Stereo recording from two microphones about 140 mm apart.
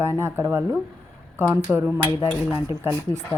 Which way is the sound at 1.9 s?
20° left (ahead or behind).